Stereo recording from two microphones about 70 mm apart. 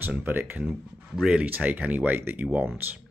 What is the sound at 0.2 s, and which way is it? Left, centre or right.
Speech, right.